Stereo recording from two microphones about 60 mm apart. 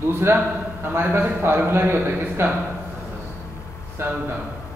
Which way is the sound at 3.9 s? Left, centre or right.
Right.